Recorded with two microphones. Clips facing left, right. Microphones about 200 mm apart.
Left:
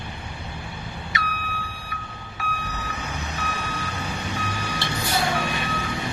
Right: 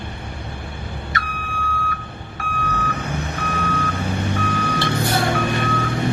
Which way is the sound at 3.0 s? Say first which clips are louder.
Right 5 dB; 55° right (ahead or behind).